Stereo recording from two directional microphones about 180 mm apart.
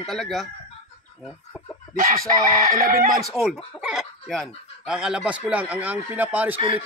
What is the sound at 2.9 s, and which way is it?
Speech, 50° right (ahead or behind).